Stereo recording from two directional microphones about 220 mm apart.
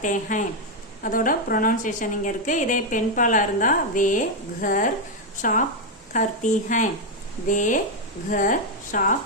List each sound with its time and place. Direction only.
0.0 s a woman's voice: 35° left (ahead or behind)